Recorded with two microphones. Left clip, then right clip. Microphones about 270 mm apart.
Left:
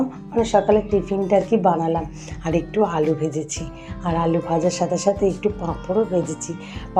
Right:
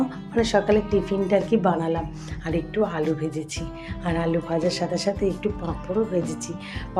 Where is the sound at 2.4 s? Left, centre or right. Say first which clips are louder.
Left 4 dB; centre.